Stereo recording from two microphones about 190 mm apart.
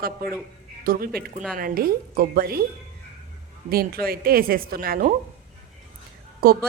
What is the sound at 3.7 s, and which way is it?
Speech, 55° right (ahead or behind).